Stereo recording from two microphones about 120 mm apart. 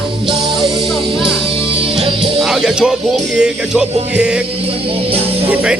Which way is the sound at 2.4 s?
5° right (ahead or behind).